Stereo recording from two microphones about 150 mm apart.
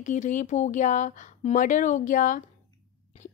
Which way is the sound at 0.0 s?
55° left (ahead or behind).